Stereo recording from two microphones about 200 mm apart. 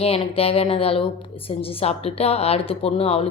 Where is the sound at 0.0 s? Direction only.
30° left (ahead or behind).